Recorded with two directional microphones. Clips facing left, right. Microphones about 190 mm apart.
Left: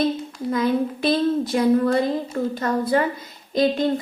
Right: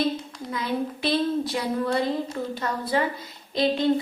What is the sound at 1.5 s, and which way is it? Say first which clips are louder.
A woman's voice: left 7 dB; 45° left (ahead or behind).